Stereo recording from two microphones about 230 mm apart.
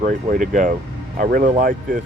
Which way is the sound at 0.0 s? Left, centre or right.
Right.